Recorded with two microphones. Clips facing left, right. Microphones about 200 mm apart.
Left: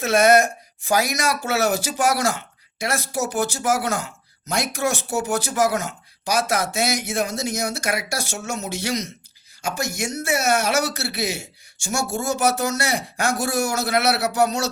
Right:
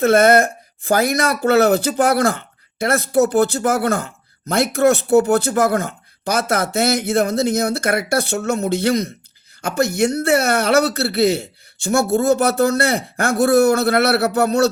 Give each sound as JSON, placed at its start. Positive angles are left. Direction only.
{"t": 0.0, "sound": "speech", "side_deg": -55}